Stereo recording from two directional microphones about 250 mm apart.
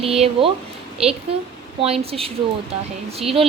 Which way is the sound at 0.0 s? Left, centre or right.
Right.